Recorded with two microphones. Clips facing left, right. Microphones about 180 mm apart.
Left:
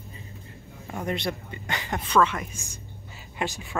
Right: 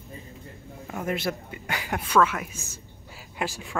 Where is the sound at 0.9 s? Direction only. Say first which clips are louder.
Right 1 dB; 5° right (ahead or behind).